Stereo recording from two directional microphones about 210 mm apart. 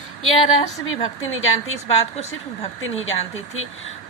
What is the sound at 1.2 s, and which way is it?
Speech, 70° left (ahead or behind).